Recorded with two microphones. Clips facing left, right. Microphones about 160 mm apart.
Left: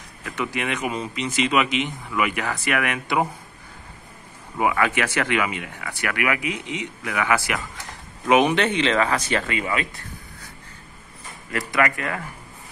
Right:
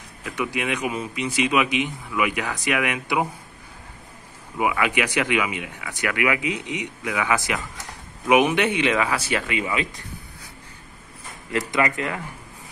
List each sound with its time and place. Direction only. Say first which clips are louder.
0.2 s a man's voice: right 1 dB; 15° right (ahead or behind)
4.6 s a man's voice: left 1 dB; 15° right (ahead or behind)
11.5 s speech: even; 20° right (ahead or behind)